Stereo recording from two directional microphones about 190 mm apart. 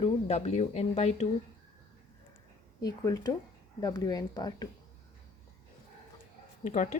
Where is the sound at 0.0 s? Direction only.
30° left (ahead or behind).